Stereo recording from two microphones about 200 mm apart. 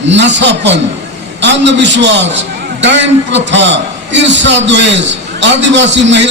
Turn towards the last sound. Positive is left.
turn(degrees=-65)  # may be behind; listen again after turning